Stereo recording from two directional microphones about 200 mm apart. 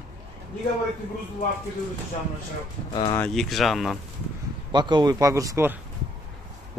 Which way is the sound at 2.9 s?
25° left (ahead or behind).